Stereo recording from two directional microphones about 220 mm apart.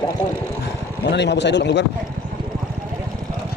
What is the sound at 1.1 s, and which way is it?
Speech, 50° left (ahead or behind).